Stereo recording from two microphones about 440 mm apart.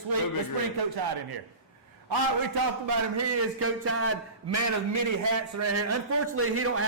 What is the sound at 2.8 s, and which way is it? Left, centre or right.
A man's voice, right.